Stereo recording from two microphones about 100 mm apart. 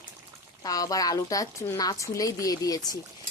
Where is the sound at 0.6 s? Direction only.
35° left (ahead or behind).